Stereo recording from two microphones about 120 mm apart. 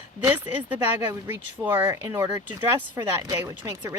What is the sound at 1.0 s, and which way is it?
Speech, 20° right (ahead or behind).